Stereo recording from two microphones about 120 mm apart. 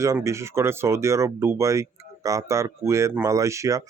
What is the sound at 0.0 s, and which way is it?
Speech, 25° right (ahead or behind).